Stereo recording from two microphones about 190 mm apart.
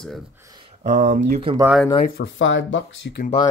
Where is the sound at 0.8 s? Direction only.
40° right (ahead or behind).